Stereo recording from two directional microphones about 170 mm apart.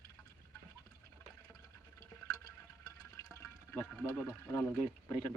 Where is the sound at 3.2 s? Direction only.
15° left (ahead or behind).